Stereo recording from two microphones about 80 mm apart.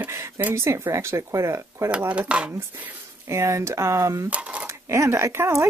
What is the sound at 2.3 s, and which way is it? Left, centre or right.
Speech, centre.